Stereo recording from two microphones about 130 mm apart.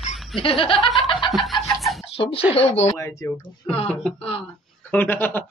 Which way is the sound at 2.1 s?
45° left (ahead or behind).